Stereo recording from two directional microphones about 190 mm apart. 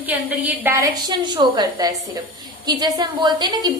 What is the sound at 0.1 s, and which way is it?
A woman's voice, 10° right (ahead or behind).